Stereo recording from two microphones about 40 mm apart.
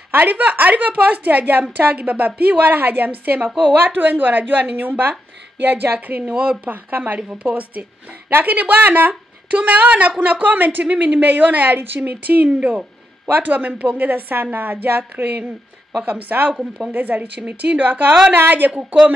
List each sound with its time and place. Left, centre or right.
0.1 s a woman's voice: right
7.2 s a woman's voice: right
17.4 s speech: right
18.3 s speech: right